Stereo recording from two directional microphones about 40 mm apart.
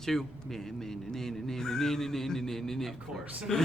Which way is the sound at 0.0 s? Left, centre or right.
Centre.